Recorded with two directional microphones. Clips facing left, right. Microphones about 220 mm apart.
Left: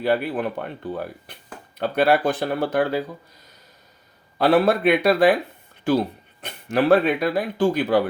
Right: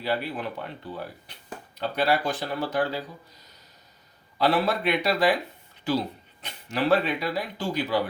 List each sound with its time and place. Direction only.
0.0 s speech: 55° left (ahead or behind)
4.4 s speech: 50° left (ahead or behind)